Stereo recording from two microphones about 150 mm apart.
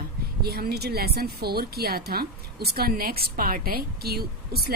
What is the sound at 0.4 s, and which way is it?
Speech, 90° right.